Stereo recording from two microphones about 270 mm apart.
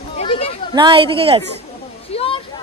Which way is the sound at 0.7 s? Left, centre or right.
Centre.